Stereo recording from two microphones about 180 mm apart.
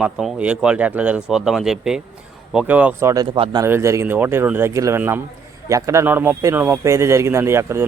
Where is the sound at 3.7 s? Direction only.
15° right (ahead or behind).